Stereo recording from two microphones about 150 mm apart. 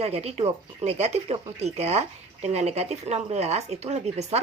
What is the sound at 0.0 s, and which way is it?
Speech, 45° right (ahead or behind).